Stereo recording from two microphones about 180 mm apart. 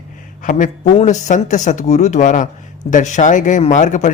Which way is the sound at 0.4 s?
45° left (ahead or behind).